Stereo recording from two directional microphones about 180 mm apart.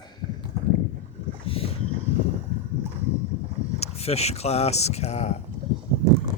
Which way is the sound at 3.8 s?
35° left (ahead or behind).